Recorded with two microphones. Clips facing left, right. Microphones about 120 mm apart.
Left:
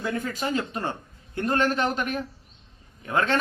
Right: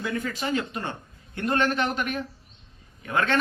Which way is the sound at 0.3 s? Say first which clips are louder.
Even; 35° left (ahead or behind).